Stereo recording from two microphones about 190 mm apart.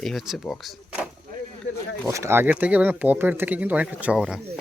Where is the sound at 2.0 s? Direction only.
15° right (ahead or behind).